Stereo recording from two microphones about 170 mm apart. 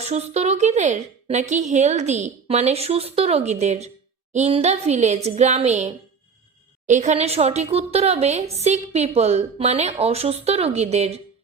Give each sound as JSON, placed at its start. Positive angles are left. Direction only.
{"t": 0.0, "sound": "speech", "side_deg": -40}